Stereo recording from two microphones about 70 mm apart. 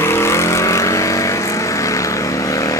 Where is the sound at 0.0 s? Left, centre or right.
Left.